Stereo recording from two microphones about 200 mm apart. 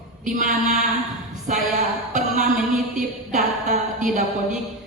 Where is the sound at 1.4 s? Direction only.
40° right (ahead or behind).